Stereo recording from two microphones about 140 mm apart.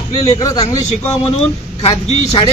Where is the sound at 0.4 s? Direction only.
25° left (ahead or behind).